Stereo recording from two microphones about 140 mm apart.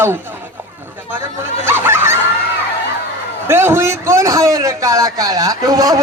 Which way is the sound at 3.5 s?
15° right (ahead or behind).